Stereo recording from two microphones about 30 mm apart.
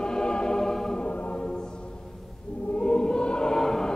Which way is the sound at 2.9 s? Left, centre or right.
Left.